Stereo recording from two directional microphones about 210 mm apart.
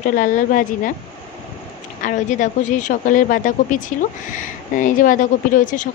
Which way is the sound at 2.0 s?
35° left (ahead or behind).